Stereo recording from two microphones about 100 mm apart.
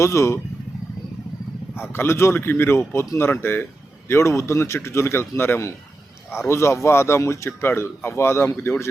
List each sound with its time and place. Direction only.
0.0 s speech: 30° left (ahead or behind)
1.7 s speech: 25° left (ahead or behind)